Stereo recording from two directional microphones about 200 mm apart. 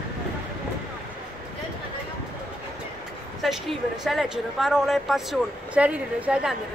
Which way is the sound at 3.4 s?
Centre (ahead or behind).